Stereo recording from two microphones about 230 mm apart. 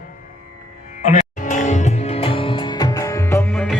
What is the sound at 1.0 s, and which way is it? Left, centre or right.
Music, left.